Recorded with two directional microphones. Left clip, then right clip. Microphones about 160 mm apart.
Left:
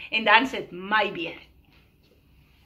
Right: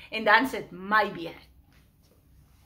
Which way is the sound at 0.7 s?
35° right (ahead or behind).